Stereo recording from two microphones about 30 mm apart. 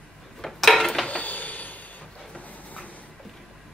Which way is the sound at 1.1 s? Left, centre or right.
Left.